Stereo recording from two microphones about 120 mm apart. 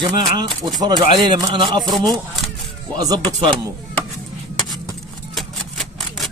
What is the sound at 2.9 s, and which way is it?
Speech, 30° right (ahead or behind).